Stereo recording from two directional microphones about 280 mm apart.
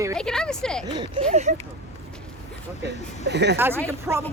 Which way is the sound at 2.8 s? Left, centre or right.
Right.